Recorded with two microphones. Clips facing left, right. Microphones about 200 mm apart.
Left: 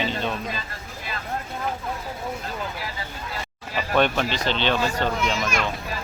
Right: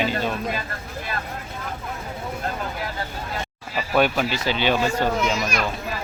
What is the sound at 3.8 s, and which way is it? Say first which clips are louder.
Speech: right 1 dB; 5° right (ahead or behind).